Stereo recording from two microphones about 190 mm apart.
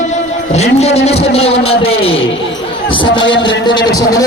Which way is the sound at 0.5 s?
35° left (ahead or behind).